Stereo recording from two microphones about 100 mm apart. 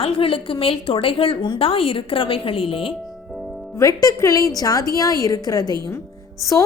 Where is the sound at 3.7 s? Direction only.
35° left (ahead or behind).